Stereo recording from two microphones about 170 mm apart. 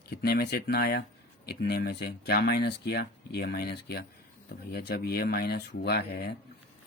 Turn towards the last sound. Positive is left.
turn(degrees=70)  # may be behind; listen again after turning